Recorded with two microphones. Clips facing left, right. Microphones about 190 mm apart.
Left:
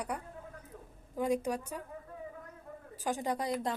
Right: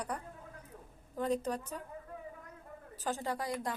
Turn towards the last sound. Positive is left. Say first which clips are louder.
# left 3 dB
turn(degrees=20)  # may be behind; listen again after turning